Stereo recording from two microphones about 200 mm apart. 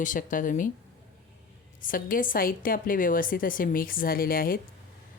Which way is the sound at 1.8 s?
45° left (ahead or behind).